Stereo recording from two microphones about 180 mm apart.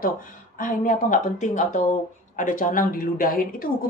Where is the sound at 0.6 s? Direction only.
50° left (ahead or behind).